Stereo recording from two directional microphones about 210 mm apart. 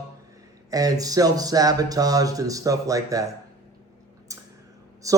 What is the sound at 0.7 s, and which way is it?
Speech, 15° right (ahead or behind).